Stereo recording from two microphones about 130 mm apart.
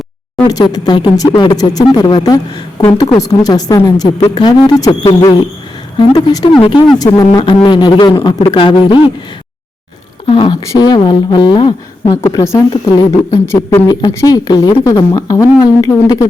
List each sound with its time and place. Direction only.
0.4 s a man's voice: 30° left (ahead or behind)
10.2 s a man's voice: 35° left (ahead or behind)
12.1 s speech: 25° left (ahead or behind)